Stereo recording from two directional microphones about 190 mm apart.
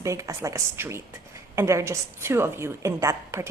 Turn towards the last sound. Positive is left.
turn(degrees=-15)  # may be behind; listen again after turning